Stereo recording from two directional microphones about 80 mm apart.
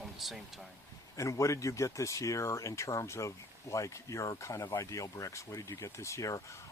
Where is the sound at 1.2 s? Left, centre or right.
Left.